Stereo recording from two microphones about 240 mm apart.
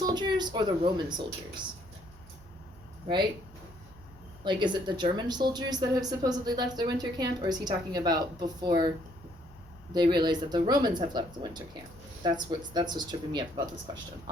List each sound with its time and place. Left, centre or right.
0.0 s speech: centre
4.4 s a woman's voice: centre
9.9 s a woman's voice: centre